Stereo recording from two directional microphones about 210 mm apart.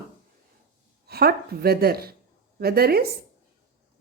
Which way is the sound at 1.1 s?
50° right (ahead or behind).